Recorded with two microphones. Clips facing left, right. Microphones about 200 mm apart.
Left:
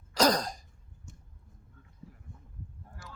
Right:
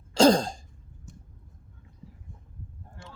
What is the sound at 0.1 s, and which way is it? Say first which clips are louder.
Throat clearing: right 7 dB; 25° right (ahead or behind).